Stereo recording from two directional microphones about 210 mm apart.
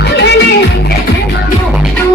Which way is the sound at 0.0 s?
55° left (ahead or behind).